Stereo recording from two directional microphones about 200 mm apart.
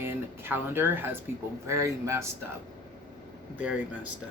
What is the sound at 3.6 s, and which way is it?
Speech, 10° right (ahead or behind).